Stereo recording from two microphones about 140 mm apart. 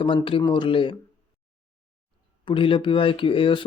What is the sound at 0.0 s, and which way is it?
Speech, 40° left (ahead or behind).